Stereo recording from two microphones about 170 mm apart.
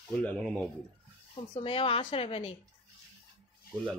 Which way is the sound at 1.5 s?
30° left (ahead or behind).